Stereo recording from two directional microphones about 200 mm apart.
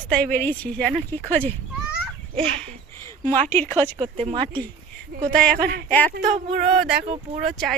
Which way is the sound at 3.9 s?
30° right (ahead or behind).